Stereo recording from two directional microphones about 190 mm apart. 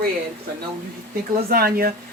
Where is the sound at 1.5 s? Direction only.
50° right (ahead or behind).